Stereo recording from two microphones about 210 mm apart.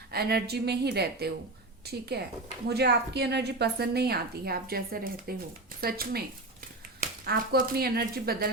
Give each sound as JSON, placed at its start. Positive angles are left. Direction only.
{"t": 0.1, "sound": "a woman's voice", "side_deg": -50}